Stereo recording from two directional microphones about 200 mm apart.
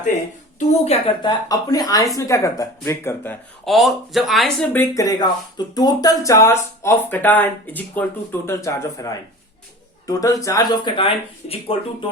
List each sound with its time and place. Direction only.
0.7 s speech: 30° left (ahead or behind); by 3.3 s 10° left (ahead or behind)
3.7 s speech: centre (ahead or behind)
4.7 s speech: 15° left (ahead or behind)